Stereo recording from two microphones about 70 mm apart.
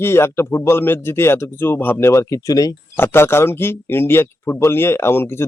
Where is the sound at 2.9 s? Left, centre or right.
Left.